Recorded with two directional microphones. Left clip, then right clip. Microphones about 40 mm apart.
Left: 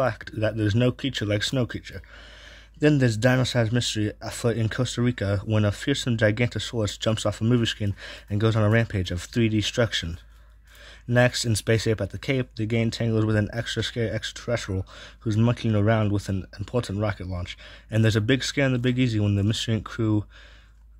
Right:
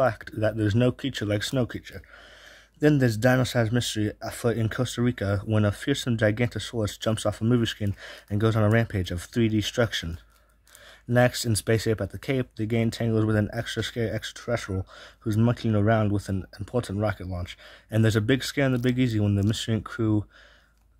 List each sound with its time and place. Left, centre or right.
0.0 s speech: right
0.7 s speech: right
3.3 s speech: right
4.0 s speech: right
6.2 s speech: centre; by 10.1 s right
11.1 s speech: right
11.6 s speech: right
13.7 s speech: right
16.0 s speech: right
17.4 s speech: right